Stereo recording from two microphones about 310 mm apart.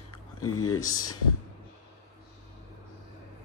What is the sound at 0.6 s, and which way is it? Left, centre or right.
Speech, centre.